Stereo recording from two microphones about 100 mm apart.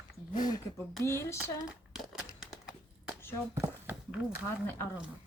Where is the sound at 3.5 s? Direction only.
15° right (ahead or behind).